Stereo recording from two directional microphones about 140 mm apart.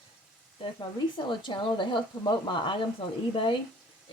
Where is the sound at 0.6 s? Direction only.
35° left (ahead or behind).